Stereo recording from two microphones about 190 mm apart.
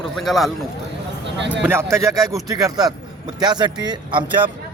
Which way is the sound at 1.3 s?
70° right (ahead or behind).